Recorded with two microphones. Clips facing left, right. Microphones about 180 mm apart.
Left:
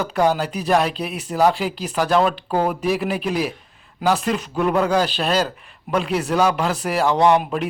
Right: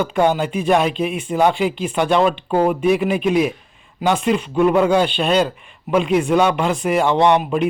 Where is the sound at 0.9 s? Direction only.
40° left (ahead or behind).